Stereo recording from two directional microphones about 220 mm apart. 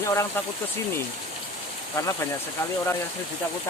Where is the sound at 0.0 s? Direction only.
15° left (ahead or behind).